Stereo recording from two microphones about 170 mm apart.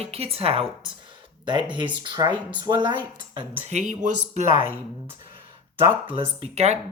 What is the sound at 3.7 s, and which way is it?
Speech, 45° right (ahead or behind).